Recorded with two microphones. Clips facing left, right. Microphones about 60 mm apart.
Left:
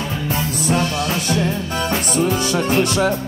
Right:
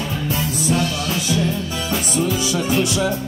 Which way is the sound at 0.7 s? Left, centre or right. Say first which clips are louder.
Left 2 dB; left.